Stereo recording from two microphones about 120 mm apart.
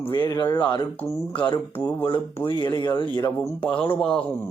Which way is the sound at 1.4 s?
40° left (ahead or behind).